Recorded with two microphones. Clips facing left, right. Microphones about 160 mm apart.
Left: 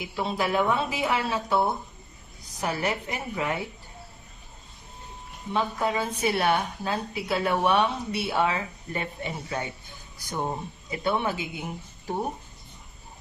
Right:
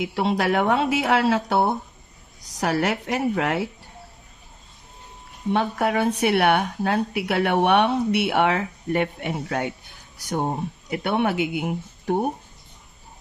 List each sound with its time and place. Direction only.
0.0 s speech: 75° right (ahead or behind)
5.5 s speech: 70° right (ahead or behind)